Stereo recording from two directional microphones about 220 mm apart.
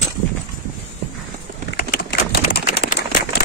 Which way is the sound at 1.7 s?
45° left (ahead or behind).